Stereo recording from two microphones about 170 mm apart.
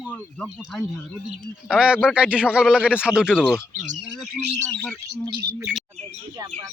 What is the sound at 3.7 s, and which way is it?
Speech, 50° right (ahead or behind).